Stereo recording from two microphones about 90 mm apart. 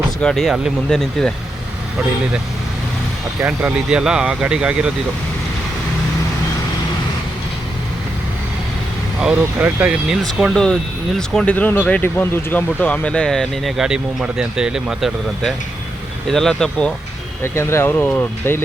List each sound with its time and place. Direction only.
0.2 s speech: 5° left (ahead or behind)
3.4 s speech: 15° right (ahead or behind)
9.3 s speech: 20° right (ahead or behind)
10.5 s speech: 5° left (ahead or behind)
11.5 s speech: 20° left (ahead or behind); by 15.1 s 5° right (ahead or behind)
16.3 s speech: 5° left (ahead or behind)
17.4 s speech: 30° left (ahead or behind)